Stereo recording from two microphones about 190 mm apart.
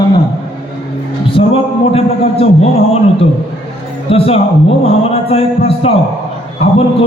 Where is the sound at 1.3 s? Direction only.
30° left (ahead or behind).